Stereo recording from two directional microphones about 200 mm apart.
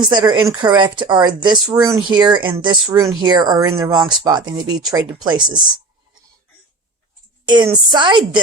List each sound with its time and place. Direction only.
0.0 s speech: 20° right (ahead or behind)
7.4 s a woman's voice: 25° right (ahead or behind)